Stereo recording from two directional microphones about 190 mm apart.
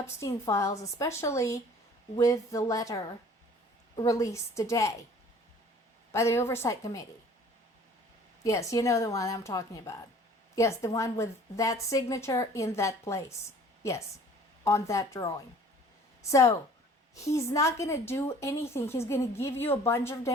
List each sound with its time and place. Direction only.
0.0 s a woman's voice: 15° left (ahead or behind)
6.1 s a woman's voice: 15° left (ahead or behind)
8.4 s a woman's voice: 15° left (ahead or behind)
14.6 s a woman's voice: 15° left (ahead or behind)